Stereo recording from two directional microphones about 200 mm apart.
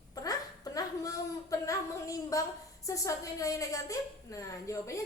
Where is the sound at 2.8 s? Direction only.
15° left (ahead or behind).